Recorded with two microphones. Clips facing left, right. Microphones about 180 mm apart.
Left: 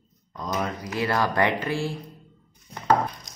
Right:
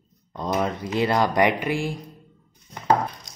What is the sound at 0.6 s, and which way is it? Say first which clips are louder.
Speech: right 4 dB; 25° right (ahead or behind).